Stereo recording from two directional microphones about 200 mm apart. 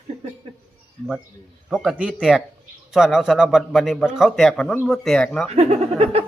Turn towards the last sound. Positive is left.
turn(degrees=-30)  # may be behind; listen again after turning